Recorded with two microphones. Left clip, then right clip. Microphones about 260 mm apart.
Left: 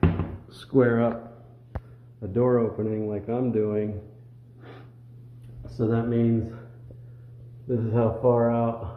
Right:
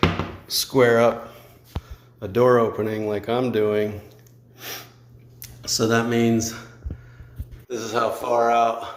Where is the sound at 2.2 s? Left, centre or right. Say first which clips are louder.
Right 6 dB; centre.